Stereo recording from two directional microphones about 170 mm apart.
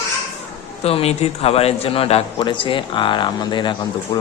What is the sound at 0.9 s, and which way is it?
A man's voice, 35° left (ahead or behind).